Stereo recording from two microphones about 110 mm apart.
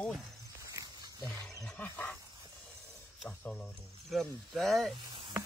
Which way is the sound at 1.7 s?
20° left (ahead or behind).